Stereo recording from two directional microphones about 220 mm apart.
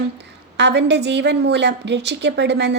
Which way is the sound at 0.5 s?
50° right (ahead or behind).